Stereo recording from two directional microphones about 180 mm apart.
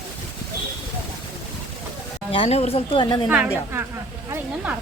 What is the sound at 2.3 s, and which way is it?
Speech, 35° left (ahead or behind).